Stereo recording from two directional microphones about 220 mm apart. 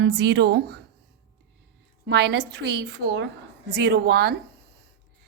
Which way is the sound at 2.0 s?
50° right (ahead or behind).